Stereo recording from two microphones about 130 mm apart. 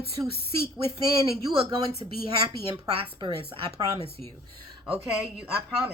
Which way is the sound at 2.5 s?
45° right (ahead or behind).